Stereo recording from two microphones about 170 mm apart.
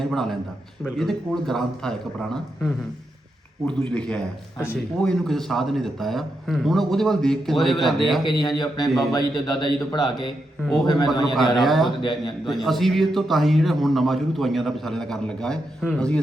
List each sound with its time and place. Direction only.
0.0 s a man's voice: centre (ahead or behind)
8.2 s a man's voice: 25° left (ahead or behind)
11.6 s a man's voice: centre (ahead or behind)